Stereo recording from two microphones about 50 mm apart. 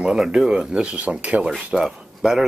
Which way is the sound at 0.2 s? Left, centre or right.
Centre.